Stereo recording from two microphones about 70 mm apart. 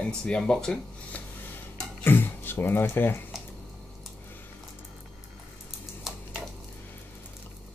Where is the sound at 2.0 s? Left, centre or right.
Left.